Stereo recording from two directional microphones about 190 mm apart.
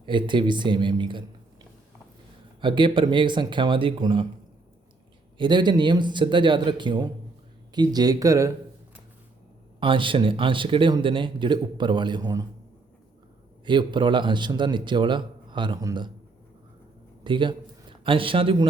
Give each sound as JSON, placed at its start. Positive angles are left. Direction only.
{"t": 0.0, "sound": "speech", "side_deg": -25}
{"t": 2.6, "sound": "speech", "side_deg": -25}
{"t": 5.4, "sound": "speech", "side_deg": -25}
{"t": 9.8, "sound": "speech", "side_deg": -25}
{"t": 13.7, "sound": "speech", "side_deg": -25}
{"t": 17.2, "sound": "speech", "side_deg": -25}